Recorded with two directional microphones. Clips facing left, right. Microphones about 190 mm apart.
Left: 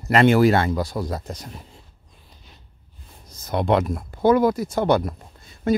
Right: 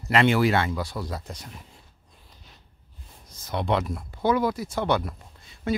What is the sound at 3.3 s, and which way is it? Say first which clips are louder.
Speech: left 5 dB; 45° left (ahead or behind).